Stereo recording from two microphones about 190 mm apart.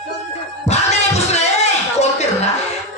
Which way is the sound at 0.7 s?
35° left (ahead or behind).